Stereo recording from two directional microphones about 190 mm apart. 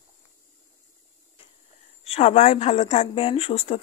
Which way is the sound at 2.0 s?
35° left (ahead or behind).